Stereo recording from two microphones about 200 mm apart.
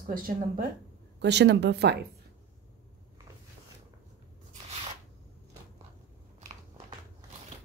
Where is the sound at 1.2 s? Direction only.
60° right (ahead or behind).